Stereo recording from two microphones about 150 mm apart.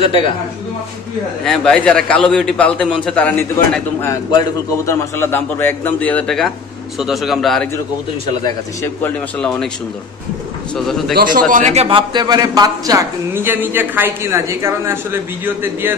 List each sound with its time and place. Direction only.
0.0 s a man's voice: 35° left (ahead or behind)
1.4 s a man's voice: 5° left (ahead or behind)
8.8 s a man's voice: 10° left (ahead or behind)
11.1 s speech: 70° right (ahead or behind); by 12.0 s 45° right (ahead or behind)
12.1 s speech: 30° right (ahead or behind)